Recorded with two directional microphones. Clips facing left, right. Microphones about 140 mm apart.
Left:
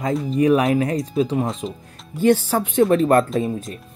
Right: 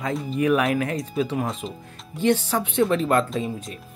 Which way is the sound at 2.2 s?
45° left (ahead or behind).